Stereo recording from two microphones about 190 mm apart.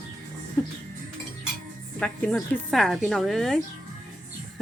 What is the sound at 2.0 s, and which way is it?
A woman's voice, 5° left (ahead or behind).